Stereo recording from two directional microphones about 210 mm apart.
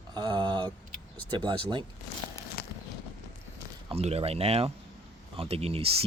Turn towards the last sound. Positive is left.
turn(degrees=-30)  # may be behind; listen again after turning